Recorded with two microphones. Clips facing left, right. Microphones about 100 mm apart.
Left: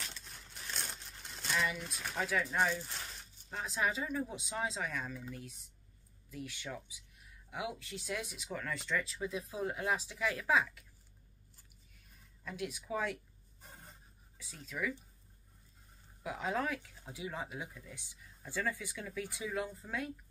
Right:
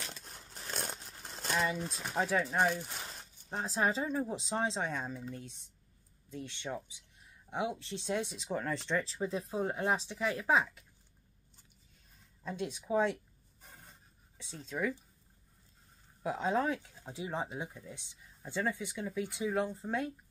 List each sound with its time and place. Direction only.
0.1 s a sound: 40° right (ahead or behind)
2.0 s speech: 30° right (ahead or behind)
2.5 s speech: 20° right (ahead or behind)
3.4 s speech: 30° right (ahead or behind)
12.4 s speech: 30° right (ahead or behind)
13.6 s a sound: centre (ahead or behind)
14.4 s speech: 30° right (ahead or behind)
16.2 s speech: 30° right (ahead or behind)